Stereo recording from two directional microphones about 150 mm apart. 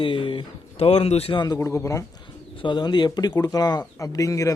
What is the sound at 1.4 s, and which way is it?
Speech, 25° left (ahead or behind).